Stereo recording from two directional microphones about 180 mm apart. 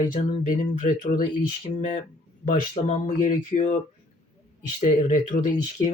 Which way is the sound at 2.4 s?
40° left (ahead or behind).